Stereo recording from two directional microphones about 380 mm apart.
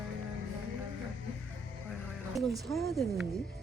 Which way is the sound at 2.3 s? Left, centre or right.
Centre.